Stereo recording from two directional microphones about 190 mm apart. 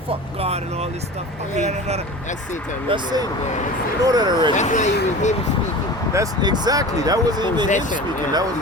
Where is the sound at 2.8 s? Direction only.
25° right (ahead or behind).